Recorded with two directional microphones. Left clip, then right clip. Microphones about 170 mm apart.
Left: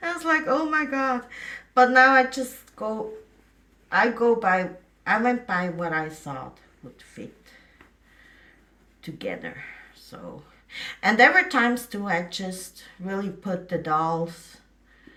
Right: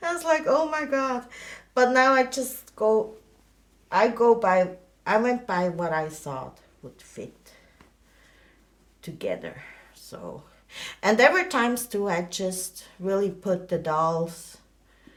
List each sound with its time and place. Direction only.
0.0 s speech: 50° right (ahead or behind)
3.8 s a woman's voice: 50° right (ahead or behind)
9.0 s a sound: 50° right (ahead or behind)
10.7 s a woman's voice: 50° right (ahead or behind)